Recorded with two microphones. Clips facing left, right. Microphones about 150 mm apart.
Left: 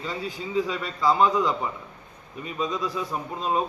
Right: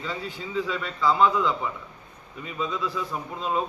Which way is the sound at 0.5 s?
15° left (ahead or behind).